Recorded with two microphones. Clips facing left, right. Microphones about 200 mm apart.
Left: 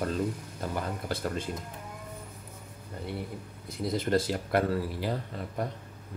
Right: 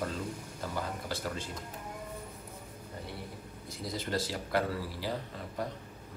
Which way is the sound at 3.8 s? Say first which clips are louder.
Left 7 dB; 55° left (ahead or behind).